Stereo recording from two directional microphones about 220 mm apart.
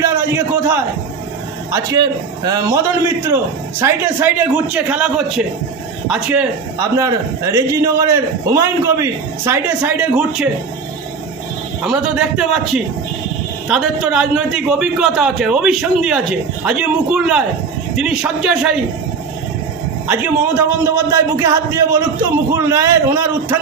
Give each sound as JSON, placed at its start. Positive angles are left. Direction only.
{"t": 0.0, "sound": "a man's voice", "side_deg": -10}
{"t": 3.8, "sound": "a man's voice", "side_deg": -10}
{"t": 11.8, "sound": "a man's voice", "side_deg": -5}
{"t": 20.1, "sound": "a man's voice", "side_deg": -10}